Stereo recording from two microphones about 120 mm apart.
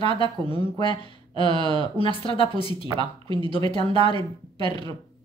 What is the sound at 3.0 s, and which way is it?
Speech, 40° right (ahead or behind).